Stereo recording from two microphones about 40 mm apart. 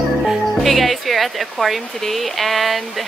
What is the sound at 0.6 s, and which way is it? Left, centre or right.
Speech, centre.